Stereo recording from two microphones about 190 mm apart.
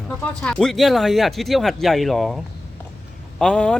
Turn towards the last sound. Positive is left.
turn(degrees=5)  # may be behind; listen again after turning